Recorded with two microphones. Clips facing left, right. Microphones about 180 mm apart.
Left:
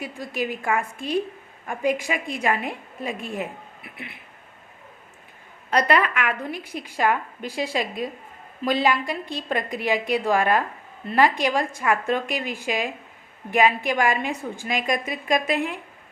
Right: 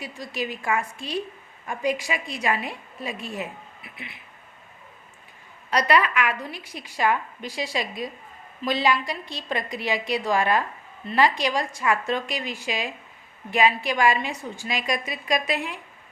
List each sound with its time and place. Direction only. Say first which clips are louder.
0.0 s a woman's voice: left 3 dB; 55° left (ahead or behind)
5.7 s a woman's voice: left 1 dB; 55° left (ahead or behind)